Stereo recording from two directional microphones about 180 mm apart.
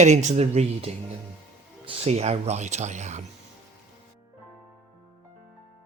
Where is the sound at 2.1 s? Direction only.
35° right (ahead or behind).